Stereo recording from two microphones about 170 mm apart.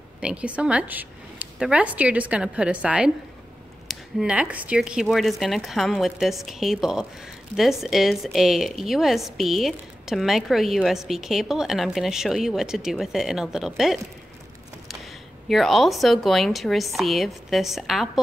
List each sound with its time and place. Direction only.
0.2 s a woman's voice: 5° right (ahead or behind)
15.4 s a woman's voice: centre (ahead or behind)